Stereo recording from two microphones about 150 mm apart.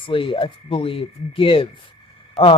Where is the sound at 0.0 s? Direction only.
35° left (ahead or behind).